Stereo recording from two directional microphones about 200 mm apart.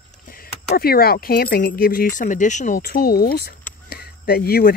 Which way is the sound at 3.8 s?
50° left (ahead or behind).